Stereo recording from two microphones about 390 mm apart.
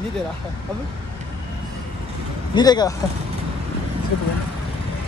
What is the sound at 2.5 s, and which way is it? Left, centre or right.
Speech, centre.